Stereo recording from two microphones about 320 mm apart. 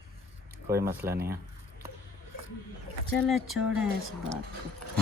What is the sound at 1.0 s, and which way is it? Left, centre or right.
Speech, right.